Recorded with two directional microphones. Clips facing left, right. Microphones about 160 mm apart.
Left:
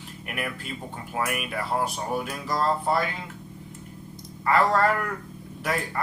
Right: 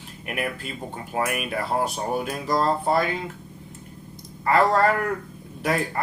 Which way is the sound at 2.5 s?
35° right (ahead or behind).